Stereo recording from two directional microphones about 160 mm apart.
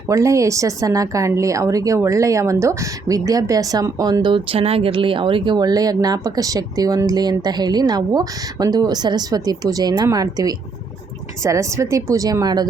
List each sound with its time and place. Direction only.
0.1 s speech: 20° right (ahead or behind)